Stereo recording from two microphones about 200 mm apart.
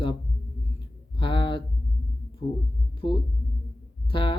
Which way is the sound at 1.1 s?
25° left (ahead or behind).